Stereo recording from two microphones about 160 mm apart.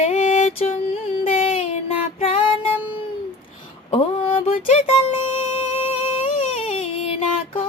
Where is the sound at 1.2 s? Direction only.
35° left (ahead or behind).